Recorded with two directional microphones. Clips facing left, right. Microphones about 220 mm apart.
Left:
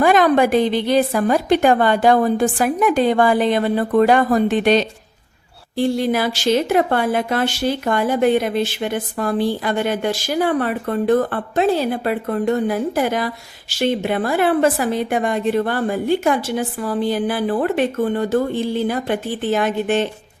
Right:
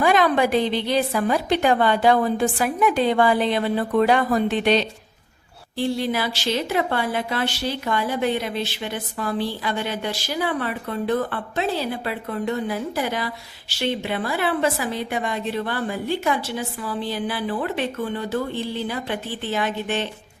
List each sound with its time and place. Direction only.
0.0 s speech: 45° left (ahead or behind)